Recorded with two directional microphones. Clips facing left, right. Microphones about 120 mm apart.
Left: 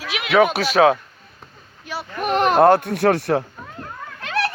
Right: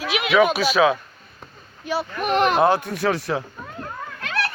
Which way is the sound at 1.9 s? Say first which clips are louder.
Right 6 dB; 20° right (ahead or behind).